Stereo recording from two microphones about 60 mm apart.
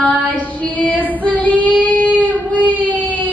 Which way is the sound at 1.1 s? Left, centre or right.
Left.